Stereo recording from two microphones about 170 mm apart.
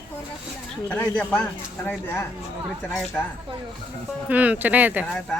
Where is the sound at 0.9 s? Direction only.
10° left (ahead or behind).